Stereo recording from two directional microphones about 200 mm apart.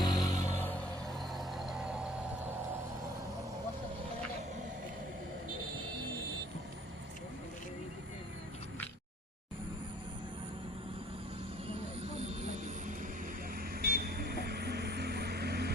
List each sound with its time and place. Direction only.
0.0 s vehicle: 20° left (ahead or behind); by 2.5 s 5° right (ahead or behind)
12.0 s vehicle: 35° right (ahead or behind)
13.6 s vehicle: 50° right (ahead or behind)